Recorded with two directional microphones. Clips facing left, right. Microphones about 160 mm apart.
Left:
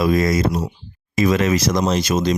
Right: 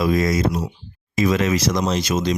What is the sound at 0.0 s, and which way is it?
Speech, 50° left (ahead or behind).